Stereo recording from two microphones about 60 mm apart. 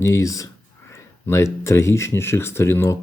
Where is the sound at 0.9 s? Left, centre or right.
Left.